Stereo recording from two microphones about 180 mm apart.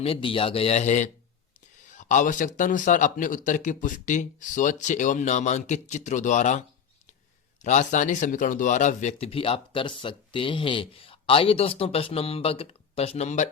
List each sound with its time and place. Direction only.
0.0 s speech: 30° left (ahead or behind)